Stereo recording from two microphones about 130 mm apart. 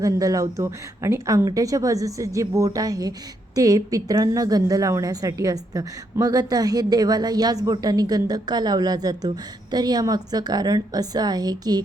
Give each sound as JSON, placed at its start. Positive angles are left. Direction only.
{"t": 0.0, "sound": "a woman's voice", "side_deg": -25}